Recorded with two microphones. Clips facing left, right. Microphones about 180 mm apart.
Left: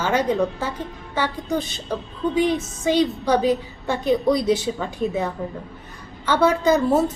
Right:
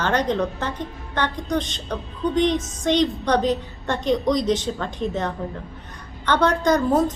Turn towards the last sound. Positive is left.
turn(degrees=10)  # may be behind; listen again after turning